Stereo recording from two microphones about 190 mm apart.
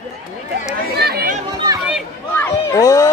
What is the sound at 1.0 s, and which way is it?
Chatter, 55° right (ahead or behind).